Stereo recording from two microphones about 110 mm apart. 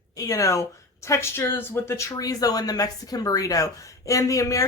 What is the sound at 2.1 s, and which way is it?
Speech, 35° left (ahead or behind).